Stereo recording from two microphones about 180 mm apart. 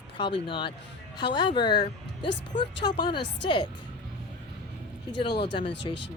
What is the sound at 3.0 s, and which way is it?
Speech, 25° left (ahead or behind).